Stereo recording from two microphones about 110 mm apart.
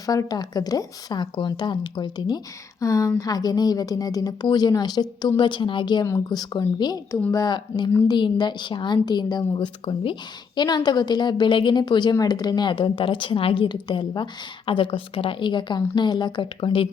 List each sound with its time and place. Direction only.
0.0 s a woman's voice: 35° left (ahead or behind)
2.8 s a woman's voice: 30° left (ahead or behind)
14.7 s a woman's voice: 55° left (ahead or behind)